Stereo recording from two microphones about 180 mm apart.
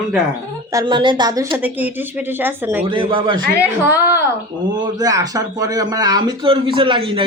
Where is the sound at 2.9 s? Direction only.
30° right (ahead or behind).